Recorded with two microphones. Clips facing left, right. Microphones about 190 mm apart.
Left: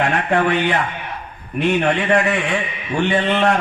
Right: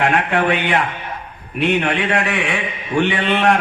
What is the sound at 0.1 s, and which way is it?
Speech, 65° right (ahead or behind).